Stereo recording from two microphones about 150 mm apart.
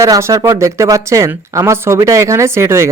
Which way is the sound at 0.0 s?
20° right (ahead or behind).